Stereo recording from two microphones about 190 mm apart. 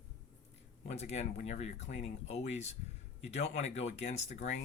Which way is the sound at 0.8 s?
35° left (ahead or behind).